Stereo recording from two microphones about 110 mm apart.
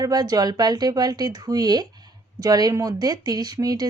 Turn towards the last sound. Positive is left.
turn(degrees=-35)  # may be behind; listen again after turning